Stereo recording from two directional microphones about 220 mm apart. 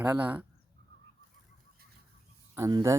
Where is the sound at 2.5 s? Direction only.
15° right (ahead or behind).